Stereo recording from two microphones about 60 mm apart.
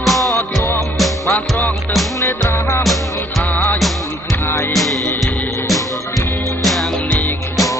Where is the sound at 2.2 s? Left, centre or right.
Left.